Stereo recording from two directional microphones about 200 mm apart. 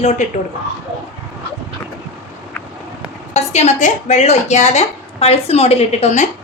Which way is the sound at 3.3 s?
35° left (ahead or behind).